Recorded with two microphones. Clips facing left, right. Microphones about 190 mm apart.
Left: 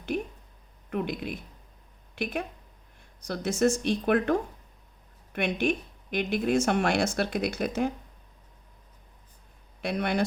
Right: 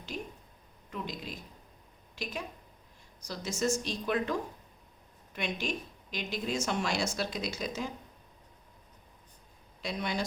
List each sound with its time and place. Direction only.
0.1 s a sound: 60° left (ahead or behind)
0.9 s speech: 60° left (ahead or behind)
9.8 s speech: 60° left (ahead or behind)